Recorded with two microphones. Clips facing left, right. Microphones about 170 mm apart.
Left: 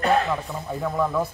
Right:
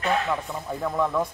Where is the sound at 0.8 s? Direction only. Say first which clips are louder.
Left 1 dB; centre (ahead or behind).